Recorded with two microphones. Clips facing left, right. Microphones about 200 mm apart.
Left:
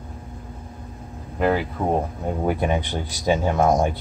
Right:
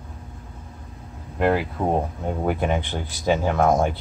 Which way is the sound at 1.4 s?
Centre (ahead or behind).